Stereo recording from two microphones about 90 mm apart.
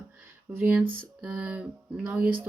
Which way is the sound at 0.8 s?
15° right (ahead or behind).